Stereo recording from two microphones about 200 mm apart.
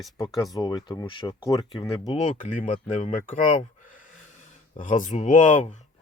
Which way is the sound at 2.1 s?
40° left (ahead or behind).